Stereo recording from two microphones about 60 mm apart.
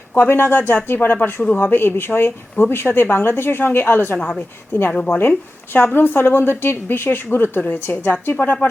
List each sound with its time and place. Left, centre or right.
0.2 s a woman's voice: left
4.2 s speech: centre
5.0 s a woman's voice: left